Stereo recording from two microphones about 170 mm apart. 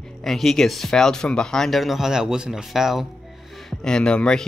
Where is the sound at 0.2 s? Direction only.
Centre (ahead or behind).